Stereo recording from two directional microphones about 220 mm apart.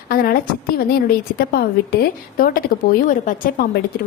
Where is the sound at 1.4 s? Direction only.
45° left (ahead or behind).